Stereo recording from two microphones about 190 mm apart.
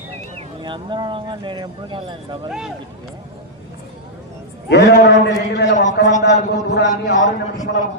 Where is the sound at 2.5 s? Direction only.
Centre (ahead or behind).